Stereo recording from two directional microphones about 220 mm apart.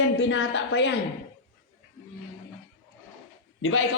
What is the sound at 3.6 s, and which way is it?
Speech, 65° left (ahead or behind).